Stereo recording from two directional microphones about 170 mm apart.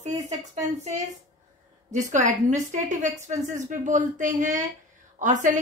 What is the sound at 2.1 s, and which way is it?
A woman's voice, 45° right (ahead or behind).